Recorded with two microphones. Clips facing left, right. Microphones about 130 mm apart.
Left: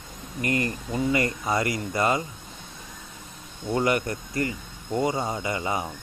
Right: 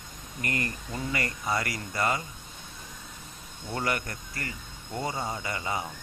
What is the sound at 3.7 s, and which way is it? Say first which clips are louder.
Speech: left 7 dB; 20° left (ahead or behind).